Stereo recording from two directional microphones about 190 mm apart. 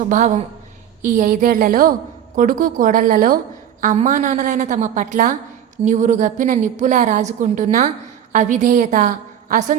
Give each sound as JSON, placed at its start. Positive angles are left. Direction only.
{"t": 0.0, "sound": "a woman's voice", "side_deg": -40}